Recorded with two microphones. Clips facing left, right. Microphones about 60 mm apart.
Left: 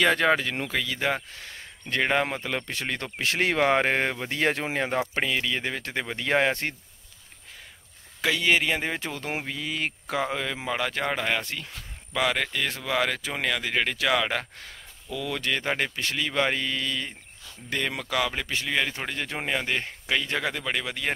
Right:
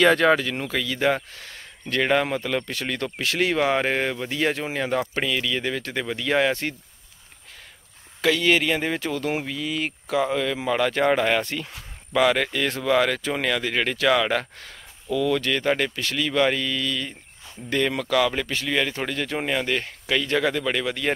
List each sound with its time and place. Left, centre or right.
0.0 s speech: centre
1.9 s speech: left
5.0 s speech: left
8.2 s speech: centre
11.0 s speech: centre; by 17.1 s left
17.6 s speech: centre